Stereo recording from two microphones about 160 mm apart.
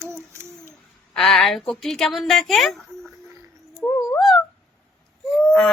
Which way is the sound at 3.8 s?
20° left (ahead or behind).